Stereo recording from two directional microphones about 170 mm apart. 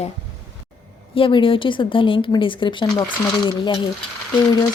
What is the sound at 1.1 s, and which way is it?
Speech, 30° left (ahead or behind).